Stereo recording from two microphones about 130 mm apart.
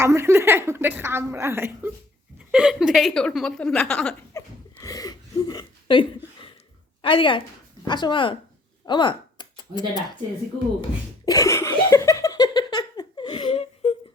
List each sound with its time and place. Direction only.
0.0 s a woman's voice: 20° right (ahead or behind)
2.5 s a woman's voice: 10° right (ahead or behind)
4.4 s a sound: 25° left (ahead or behind)
7.0 s speech: 40° left (ahead or behind)
8.9 s a sound: 35° left (ahead or behind)
11.3 s laughter: 25° left (ahead or behind); by 13.9 s 50° left (ahead or behind)